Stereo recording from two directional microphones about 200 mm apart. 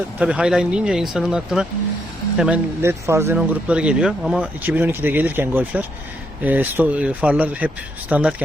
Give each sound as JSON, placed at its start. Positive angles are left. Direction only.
{"t": 0.2, "sound": "speech", "side_deg": -5}